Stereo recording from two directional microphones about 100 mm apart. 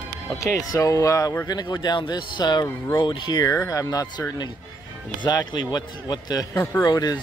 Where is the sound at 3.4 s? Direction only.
35° left (ahead or behind).